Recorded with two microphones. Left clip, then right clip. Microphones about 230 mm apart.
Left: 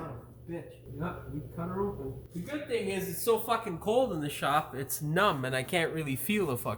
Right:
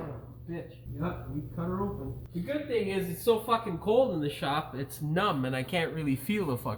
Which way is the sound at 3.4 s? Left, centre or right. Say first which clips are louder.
Right 2 dB; left.